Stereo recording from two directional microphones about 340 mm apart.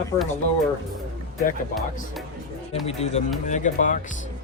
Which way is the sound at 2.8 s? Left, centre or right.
Centre.